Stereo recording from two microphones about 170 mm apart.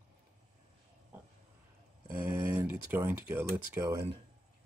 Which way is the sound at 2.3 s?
15° right (ahead or behind).